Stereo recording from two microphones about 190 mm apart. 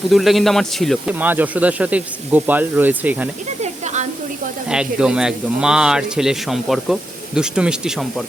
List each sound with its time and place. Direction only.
0.1 s speech: centre (ahead or behind)
3.6 s a sound: 35° right (ahead or behind)
4.7 s speech: 5° right (ahead or behind)